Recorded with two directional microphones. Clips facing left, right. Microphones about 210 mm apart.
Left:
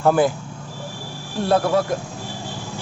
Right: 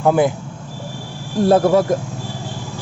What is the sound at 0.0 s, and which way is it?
Speech, 15° right (ahead or behind).